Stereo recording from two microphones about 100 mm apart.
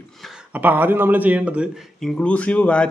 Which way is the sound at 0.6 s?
20° right (ahead or behind).